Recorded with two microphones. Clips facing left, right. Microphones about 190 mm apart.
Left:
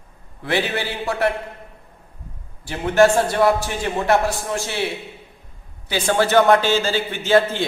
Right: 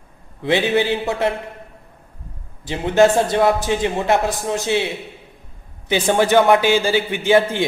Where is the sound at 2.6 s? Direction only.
20° right (ahead or behind).